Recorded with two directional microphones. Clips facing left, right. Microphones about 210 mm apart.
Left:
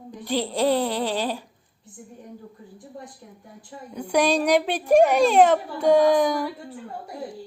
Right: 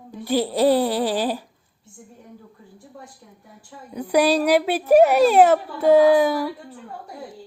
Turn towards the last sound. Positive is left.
turn(degrees=-5)  # may be behind; listen again after turning